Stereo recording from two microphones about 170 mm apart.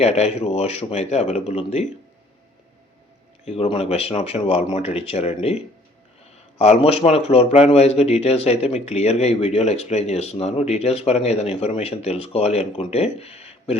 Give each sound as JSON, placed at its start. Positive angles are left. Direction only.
{"t": 0.0, "sound": "a man's voice", "side_deg": 40}
{"t": 3.4, "sound": "a man's voice", "side_deg": 40}